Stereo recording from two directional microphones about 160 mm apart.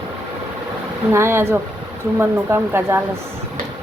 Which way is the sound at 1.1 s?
15° right (ahead or behind).